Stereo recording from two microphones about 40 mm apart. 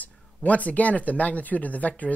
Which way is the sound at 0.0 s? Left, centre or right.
Left.